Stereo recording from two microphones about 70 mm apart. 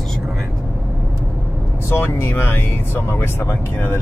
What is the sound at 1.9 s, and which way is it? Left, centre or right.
Speech, left.